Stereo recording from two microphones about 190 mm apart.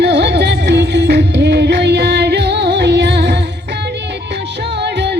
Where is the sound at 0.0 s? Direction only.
65° right (ahead or behind).